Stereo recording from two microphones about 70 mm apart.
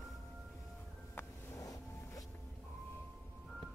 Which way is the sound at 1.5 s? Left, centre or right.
Left.